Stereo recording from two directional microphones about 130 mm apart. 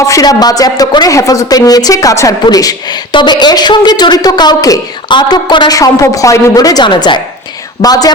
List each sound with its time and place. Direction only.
0.0 s a woman's voice: 25° left (ahead or behind)